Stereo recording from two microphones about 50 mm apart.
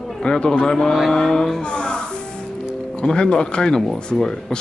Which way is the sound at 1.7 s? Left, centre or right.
Left.